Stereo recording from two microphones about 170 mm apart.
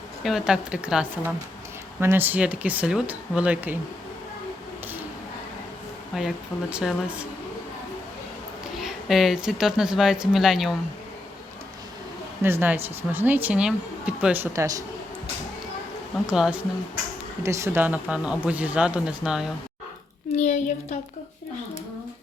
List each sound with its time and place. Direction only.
0.2 s speech: centre (ahead or behind)
6.1 s speech: 5° right (ahead or behind)
8.8 s speech: centre (ahead or behind)
12.4 s speech: 15° right (ahead or behind)
16.2 s speech: 5° right (ahead or behind)
17.4 s speech: 15° right (ahead or behind)
20.3 s a child's voice: 45° left (ahead or behind)